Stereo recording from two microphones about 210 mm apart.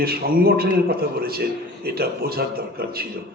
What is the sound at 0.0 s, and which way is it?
A man's voice, 45° right (ahead or behind).